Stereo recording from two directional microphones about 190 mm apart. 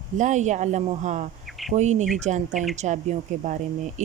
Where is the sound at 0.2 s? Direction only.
40° right (ahead or behind).